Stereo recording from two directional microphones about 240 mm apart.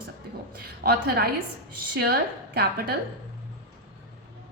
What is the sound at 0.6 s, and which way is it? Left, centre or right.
A woman's voice, right.